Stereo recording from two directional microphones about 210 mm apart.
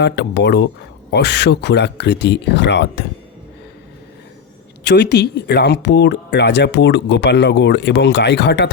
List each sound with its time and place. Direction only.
0.0 s speech: 55° left (ahead or behind)
4.8 s speech: 55° left (ahead or behind)